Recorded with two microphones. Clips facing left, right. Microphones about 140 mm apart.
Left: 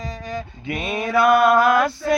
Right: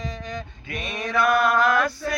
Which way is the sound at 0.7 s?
25° left (ahead or behind).